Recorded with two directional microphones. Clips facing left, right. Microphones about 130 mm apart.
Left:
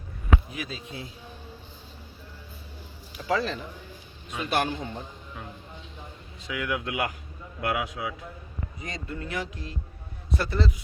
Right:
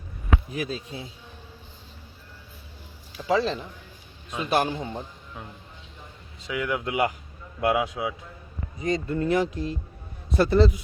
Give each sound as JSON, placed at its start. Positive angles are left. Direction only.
{"t": 0.5, "sound": "speech", "side_deg": -40}
{"t": 3.2, "sound": "speech", "side_deg": -25}
{"t": 6.5, "sound": "speech", "side_deg": -25}
{"t": 8.8, "sound": "speech", "side_deg": -35}